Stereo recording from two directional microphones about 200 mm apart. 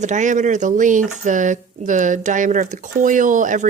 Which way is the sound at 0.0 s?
35° right (ahead or behind).